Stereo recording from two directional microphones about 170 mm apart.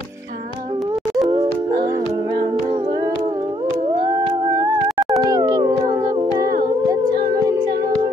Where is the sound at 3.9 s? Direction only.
25° right (ahead or behind).